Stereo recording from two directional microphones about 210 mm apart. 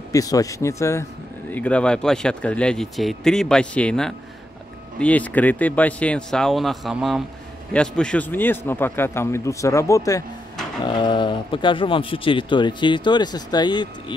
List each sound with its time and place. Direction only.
0.1 s a man's voice: 15° left (ahead or behind)